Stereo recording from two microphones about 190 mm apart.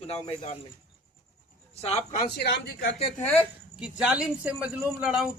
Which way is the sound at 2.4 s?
60° left (ahead or behind).